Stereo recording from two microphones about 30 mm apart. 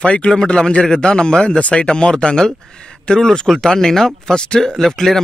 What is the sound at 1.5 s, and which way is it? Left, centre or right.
Speech, left.